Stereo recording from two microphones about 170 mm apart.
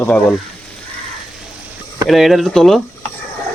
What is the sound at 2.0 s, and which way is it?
Speech, centre (ahead or behind).